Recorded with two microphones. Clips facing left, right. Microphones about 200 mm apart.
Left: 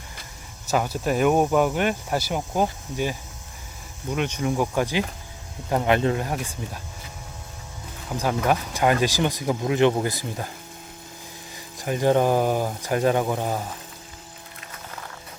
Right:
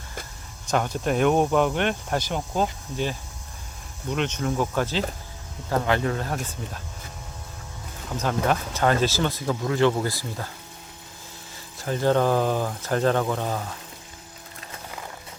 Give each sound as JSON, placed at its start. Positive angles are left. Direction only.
{"t": 0.7, "sound": "speech", "side_deg": 5}
{"t": 8.1, "sound": "speech", "side_deg": 10}
{"t": 11.8, "sound": "speech", "side_deg": 15}